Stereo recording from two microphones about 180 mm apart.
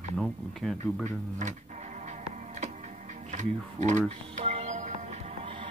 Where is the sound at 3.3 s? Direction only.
40° right (ahead or behind).